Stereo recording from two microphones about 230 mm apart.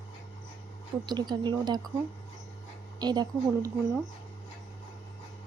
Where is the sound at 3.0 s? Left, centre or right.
Centre.